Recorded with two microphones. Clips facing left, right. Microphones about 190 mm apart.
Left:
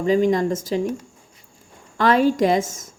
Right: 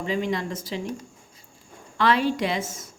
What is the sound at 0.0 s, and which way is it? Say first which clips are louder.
Speech: left 9 dB; 40° left (ahead or behind).